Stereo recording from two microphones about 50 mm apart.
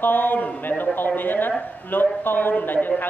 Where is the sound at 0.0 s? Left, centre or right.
Left.